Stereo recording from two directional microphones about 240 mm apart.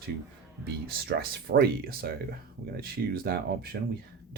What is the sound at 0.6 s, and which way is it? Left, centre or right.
Speech, right.